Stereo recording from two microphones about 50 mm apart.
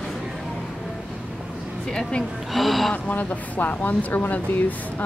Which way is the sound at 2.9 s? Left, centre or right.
Left.